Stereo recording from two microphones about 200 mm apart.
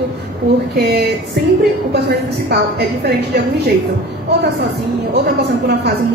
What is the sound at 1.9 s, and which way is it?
A woman's voice, 55° right (ahead or behind).